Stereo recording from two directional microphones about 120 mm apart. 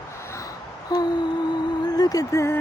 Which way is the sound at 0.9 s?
35° left (ahead or behind).